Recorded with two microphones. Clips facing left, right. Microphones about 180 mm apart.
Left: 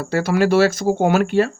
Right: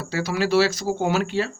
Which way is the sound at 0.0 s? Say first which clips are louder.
Left 7 dB; 55° left (ahead or behind).